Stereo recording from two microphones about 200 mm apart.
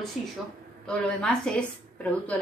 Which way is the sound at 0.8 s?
5° left (ahead or behind).